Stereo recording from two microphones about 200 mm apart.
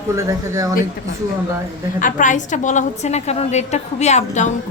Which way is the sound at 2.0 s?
40° left (ahead or behind).